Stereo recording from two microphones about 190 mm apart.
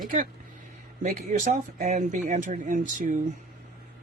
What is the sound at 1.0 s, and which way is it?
Speech, 40° right (ahead or behind).